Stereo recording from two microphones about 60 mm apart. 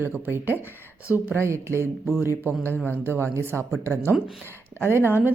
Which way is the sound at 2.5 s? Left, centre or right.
Left.